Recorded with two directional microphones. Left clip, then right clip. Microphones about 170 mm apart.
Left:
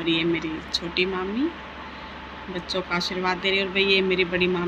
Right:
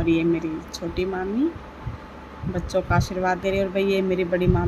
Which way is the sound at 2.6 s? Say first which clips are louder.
Right 3 dB; 65° right (ahead or behind).